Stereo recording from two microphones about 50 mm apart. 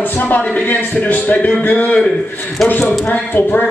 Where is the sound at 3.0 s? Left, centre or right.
Left.